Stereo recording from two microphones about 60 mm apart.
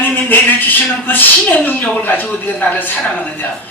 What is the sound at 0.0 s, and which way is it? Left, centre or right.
A woman's voice, left.